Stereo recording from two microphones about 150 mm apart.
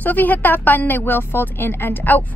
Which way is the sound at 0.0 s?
10° left (ahead or behind).